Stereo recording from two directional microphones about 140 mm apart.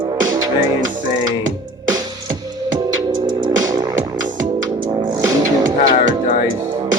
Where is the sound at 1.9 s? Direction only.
25° right (ahead or behind).